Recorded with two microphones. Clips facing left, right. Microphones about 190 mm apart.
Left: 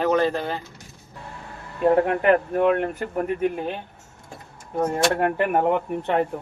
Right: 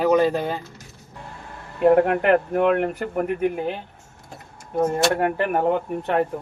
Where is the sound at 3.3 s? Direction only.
Centre (ahead or behind).